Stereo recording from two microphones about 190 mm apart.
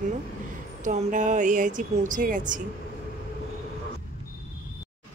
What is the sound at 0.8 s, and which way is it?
A woman's voice, 40° right (ahead or behind).